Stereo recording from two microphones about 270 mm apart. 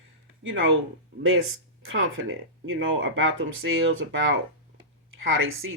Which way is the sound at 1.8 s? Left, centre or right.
Right.